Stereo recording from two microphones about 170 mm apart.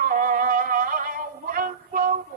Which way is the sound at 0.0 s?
55° right (ahead or behind).